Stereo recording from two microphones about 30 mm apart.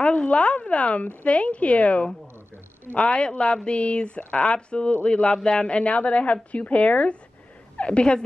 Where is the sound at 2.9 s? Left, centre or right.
Left.